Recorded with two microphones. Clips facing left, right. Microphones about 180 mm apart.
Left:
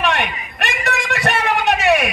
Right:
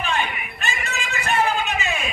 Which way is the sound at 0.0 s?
75° left (ahead or behind).